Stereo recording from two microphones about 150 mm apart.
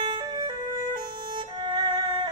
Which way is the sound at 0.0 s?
30° right (ahead or behind).